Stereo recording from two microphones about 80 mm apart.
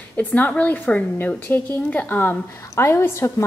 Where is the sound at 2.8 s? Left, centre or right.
Left.